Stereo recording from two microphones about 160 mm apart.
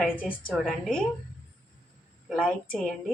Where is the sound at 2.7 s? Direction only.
5° left (ahead or behind).